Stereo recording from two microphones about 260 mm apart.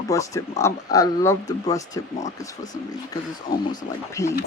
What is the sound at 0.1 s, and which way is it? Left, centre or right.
Speech, centre.